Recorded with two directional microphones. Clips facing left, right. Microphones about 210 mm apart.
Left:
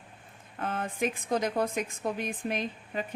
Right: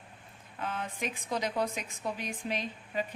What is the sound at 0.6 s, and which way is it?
A woman's voice, 50° left (ahead or behind).